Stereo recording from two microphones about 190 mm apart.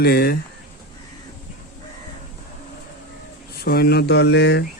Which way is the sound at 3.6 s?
55° left (ahead or behind).